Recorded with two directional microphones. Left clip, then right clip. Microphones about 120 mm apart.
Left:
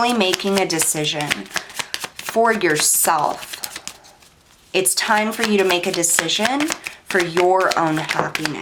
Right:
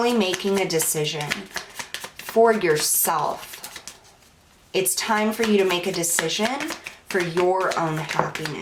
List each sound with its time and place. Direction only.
0.3 s speech: 30° left (ahead or behind)
4.7 s speech: 40° left (ahead or behind)